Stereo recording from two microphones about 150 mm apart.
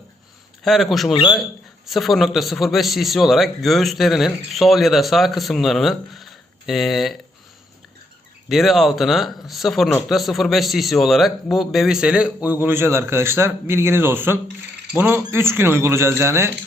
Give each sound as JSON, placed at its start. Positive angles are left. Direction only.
{"t": 0.6, "sound": "a man's voice", "side_deg": 0}
{"t": 8.4, "sound": "a man's voice", "side_deg": 0}